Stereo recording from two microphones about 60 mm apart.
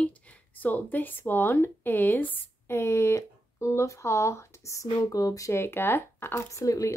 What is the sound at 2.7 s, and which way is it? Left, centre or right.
Speech, left.